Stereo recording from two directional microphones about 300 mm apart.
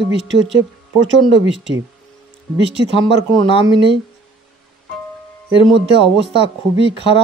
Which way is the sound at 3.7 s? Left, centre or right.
Right.